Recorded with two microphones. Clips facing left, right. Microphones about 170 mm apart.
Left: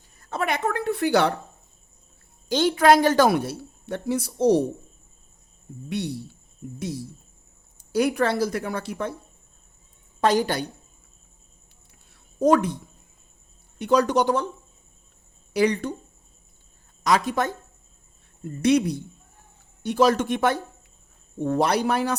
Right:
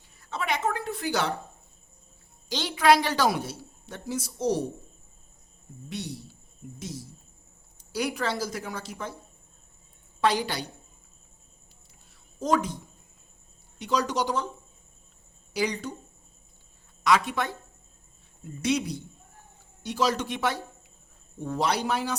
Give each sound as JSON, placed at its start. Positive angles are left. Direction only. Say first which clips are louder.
{"t": 0.2, "sound": "a woman's voice", "louder": "left 3 dB", "side_deg": 50}
{"t": 2.5, "sound": "a woman's voice", "louder": "left 4 dB", "side_deg": 50}
{"t": 5.9, "sound": "a woman's voice", "louder": "left 7 dB", "side_deg": 60}
{"t": 10.2, "sound": "speech", "louder": "left 5 dB", "side_deg": 45}
{"t": 12.4, "sound": "a woman's voice", "louder": "left 7 dB", "side_deg": 60}
{"t": 13.7, "sound": "a woman's voice", "louder": "left 7 dB", "side_deg": 55}
{"t": 15.5, "sound": "a woman's voice", "louder": "left 7 dB", "side_deg": 60}
{"t": 17.0, "sound": "speech", "louder": "left 2 dB", "side_deg": 40}
{"t": 18.4, "sound": "a woman's voice", "louder": "left 7 dB", "side_deg": 60}